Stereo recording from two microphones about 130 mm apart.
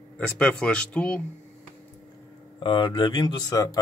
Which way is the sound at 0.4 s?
10° left (ahead or behind).